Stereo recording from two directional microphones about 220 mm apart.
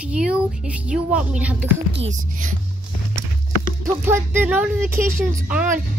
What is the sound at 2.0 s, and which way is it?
Speech, 35° right (ahead or behind).